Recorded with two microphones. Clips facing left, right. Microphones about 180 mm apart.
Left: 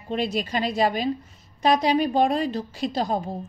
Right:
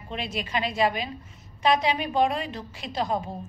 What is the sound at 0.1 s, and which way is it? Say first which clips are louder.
A woman's voice: left 5 dB; 40° left (ahead or behind).